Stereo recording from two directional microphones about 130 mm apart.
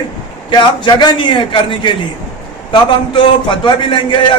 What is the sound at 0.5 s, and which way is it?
A man's voice, 35° left (ahead or behind).